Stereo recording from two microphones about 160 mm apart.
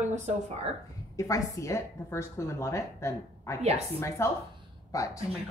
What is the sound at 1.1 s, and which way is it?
A woman's voice, 20° left (ahead or behind).